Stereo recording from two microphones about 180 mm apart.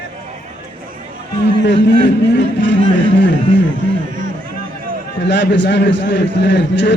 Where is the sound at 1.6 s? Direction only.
75° left (ahead or behind).